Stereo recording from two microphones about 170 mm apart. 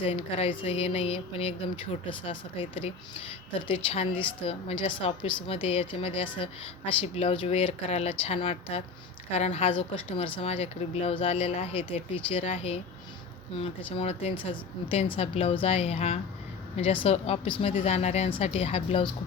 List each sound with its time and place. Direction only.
0.0 s speech: 35° left (ahead or behind)